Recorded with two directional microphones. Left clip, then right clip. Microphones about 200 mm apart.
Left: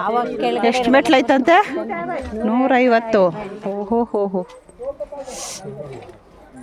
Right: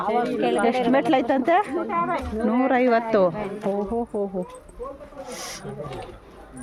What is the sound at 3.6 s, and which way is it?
Speech, 35° left (ahead or behind).